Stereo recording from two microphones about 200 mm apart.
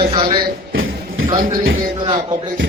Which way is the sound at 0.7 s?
80° right.